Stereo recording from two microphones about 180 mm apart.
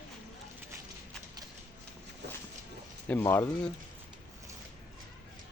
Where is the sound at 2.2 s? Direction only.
70° right (ahead or behind).